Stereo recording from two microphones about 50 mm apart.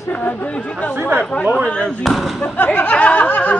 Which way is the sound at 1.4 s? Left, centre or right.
Centre.